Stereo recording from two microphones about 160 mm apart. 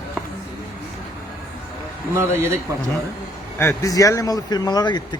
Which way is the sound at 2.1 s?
15° right (ahead or behind).